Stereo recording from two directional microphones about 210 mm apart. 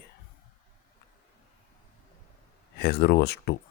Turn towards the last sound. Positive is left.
turn(degrees=50)  # may be behind; listen again after turning